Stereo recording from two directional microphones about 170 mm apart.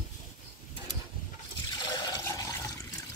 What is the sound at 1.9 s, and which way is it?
Toilet flush, 20° left (ahead or behind).